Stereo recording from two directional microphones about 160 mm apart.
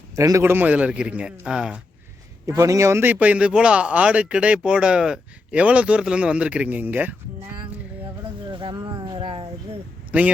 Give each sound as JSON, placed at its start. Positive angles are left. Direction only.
{"t": 0.2, "sound": "a man's voice", "side_deg": -20}
{"t": 2.5, "sound": "a man's voice", "side_deg": -20}
{"t": 8.5, "sound": "a sound", "side_deg": -30}
{"t": 10.1, "sound": "speech", "side_deg": -5}